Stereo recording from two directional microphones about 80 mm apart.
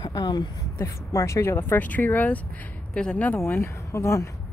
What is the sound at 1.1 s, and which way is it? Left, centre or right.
Speech, left.